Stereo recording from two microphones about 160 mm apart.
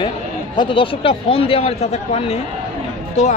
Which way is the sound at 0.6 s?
35° left (ahead or behind).